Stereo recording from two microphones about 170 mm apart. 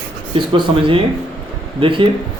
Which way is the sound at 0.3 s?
25° right (ahead or behind).